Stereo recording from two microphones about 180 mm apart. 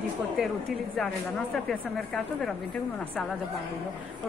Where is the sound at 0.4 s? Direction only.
Centre (ahead or behind).